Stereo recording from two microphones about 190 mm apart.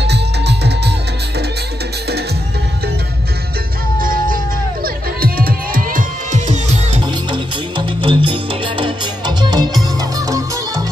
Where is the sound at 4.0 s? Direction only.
45° right (ahead or behind).